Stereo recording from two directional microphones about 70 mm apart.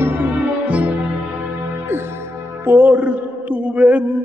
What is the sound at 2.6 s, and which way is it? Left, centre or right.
Music, right.